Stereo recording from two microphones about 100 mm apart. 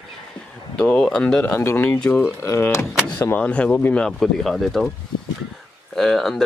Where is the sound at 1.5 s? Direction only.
20° left (ahead or behind).